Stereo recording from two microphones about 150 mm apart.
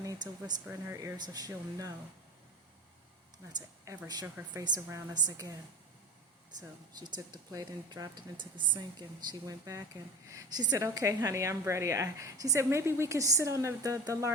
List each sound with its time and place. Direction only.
0.0 s a woman's voice: 25° right (ahead or behind)
3.9 s a woman's voice: 20° right (ahead or behind)
6.6 s a woman's voice: 25° right (ahead or behind)